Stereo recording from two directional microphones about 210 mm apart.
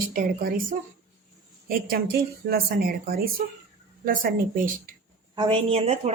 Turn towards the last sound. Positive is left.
turn(degrees=-30)  # may be behind; listen again after turning